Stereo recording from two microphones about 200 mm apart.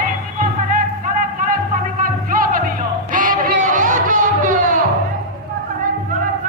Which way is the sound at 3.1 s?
40° right (ahead or behind).